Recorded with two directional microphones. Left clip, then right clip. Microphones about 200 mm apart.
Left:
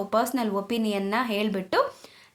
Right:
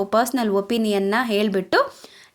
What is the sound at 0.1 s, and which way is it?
Speech, 30° right (ahead or behind).